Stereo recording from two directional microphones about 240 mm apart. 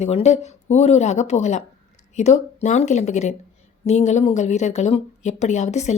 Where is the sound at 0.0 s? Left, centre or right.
Left.